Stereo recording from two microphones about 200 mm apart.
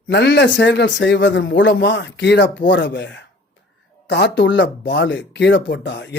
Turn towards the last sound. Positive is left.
turn(degrees=60)  # may be behind; listen again after turning